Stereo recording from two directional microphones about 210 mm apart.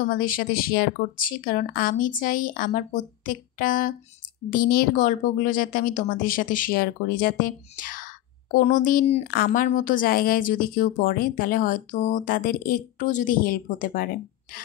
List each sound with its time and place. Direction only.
0.0 s a woman's voice: 40° left (ahead or behind)